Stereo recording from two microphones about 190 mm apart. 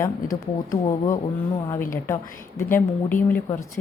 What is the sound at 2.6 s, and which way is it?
Speech, 10° left (ahead or behind).